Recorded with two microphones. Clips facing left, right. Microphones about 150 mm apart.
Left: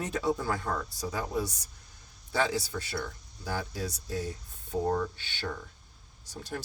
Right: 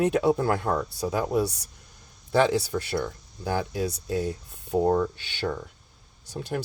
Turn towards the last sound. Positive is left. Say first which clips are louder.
# right 7 dB
turn(degrees=-70)  # may be behind; listen again after turning